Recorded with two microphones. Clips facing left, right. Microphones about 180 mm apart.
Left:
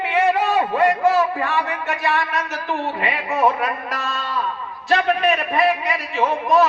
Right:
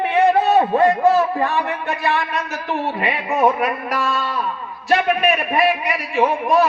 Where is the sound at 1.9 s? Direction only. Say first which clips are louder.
Right 1 dB; 15° right (ahead or behind).